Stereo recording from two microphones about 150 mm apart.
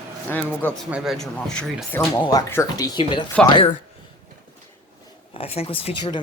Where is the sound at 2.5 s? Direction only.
20° left (ahead or behind).